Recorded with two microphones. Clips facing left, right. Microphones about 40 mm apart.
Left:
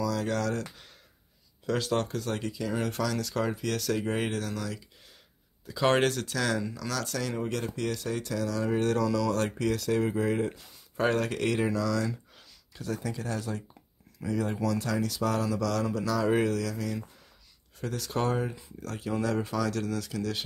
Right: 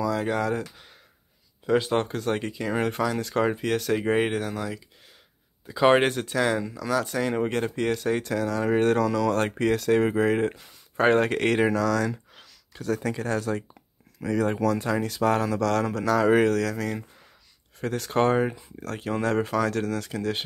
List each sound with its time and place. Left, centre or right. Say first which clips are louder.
0.0 s speech: right 4 dB; right
1.7 s speech: right 5 dB; right
6.6 s speech: right 7 dB; centre
7.3 s speech: right 6 dB; right
14.7 s speech: right 4 dB; right